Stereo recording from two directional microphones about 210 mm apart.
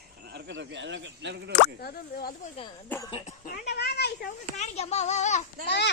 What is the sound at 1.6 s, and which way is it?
Speech, 45° left (ahead or behind).